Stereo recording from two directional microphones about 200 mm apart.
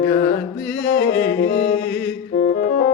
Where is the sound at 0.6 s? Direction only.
5° left (ahead or behind).